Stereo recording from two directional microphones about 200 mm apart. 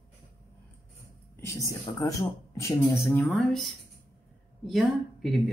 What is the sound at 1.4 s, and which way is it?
Speech, 15° left (ahead or behind).